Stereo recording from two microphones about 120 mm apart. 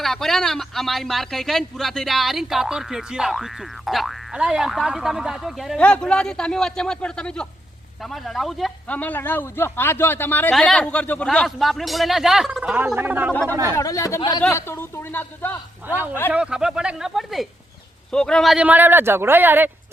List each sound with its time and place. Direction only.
0.0 s speech: centre (ahead or behind)
8.9 s speech: 15° left (ahead or behind)
10.5 s speech: 5° left (ahead or behind)
11.3 s speech: centre (ahead or behind); by 13.3 s 15° right (ahead or behind)
13.5 s speech: 30° right (ahead or behind)
13.7 s a man's voice: 25° left (ahead or behind)
14.2 s speech: 40° left (ahead or behind)
14.5 s a man's voice: 20° left (ahead or behind)
16.3 s speech: 5° right (ahead or behind)
18.5 s speech: 10° right (ahead or behind)